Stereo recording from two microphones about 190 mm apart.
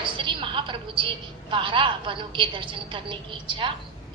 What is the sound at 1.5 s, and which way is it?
A woman's voice, 25° right (ahead or behind).